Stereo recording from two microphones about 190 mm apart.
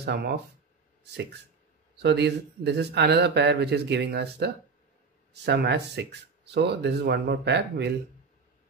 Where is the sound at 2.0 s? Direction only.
65° right (ahead or behind).